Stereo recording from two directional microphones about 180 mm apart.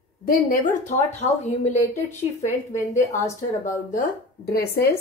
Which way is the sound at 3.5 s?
50° left (ahead or behind).